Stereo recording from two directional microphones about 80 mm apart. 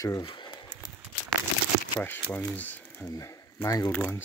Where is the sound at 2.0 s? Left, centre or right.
Left.